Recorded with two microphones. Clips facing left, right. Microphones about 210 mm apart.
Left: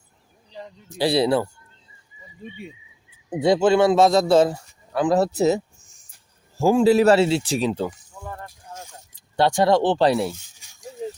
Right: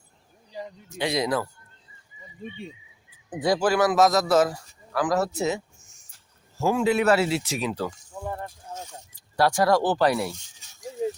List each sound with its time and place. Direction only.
0.9 s speech: 35° left (ahead or behind)
3.2 s a man's voice: 25° left (ahead or behind)
8.2 s a sound: 20° right (ahead or behind)
9.3 s speech: 25° left (ahead or behind)